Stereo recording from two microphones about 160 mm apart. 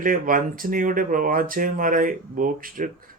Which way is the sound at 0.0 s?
60° right (ahead or behind).